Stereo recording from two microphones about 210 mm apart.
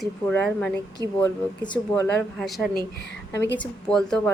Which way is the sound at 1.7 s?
10° left (ahead or behind).